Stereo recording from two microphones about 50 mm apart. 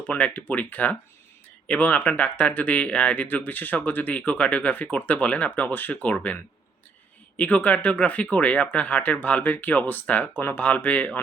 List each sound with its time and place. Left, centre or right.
0.1 s speech: left
3.2 s speech: left
7.3 s speech: left